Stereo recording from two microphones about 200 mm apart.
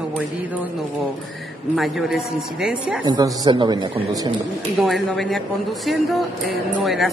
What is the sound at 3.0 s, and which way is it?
A man's voice, 20° right (ahead or behind).